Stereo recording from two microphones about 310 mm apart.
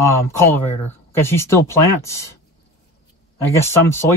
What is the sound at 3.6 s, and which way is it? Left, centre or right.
Speech, centre.